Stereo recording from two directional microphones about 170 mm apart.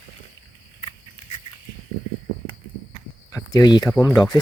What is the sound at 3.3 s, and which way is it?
Cricket, 20° left (ahead or behind).